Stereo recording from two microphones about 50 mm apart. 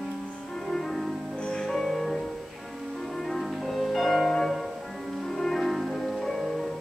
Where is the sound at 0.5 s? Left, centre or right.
Centre.